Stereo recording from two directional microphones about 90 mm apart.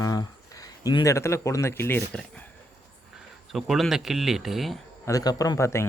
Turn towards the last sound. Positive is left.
turn(degrees=30)  # may be behind; listen again after turning